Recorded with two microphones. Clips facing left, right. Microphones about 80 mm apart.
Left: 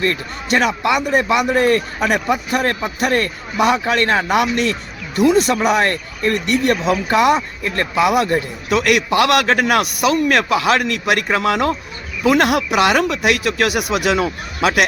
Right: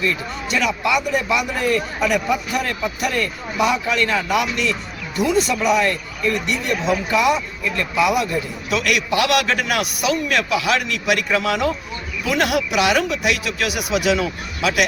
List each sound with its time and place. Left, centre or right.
0.0 s speech: left